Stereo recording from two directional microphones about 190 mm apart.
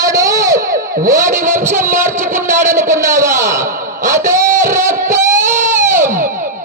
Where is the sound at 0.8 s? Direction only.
45° right (ahead or behind).